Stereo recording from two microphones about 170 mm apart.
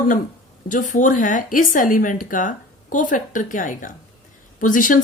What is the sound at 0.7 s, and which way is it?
A woman's voice, 50° left (ahead or behind).